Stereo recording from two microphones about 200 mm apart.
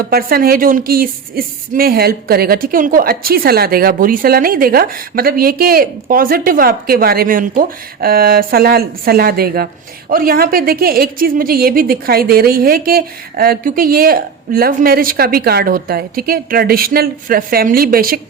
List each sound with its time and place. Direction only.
0.1 s speech: 50° right (ahead or behind)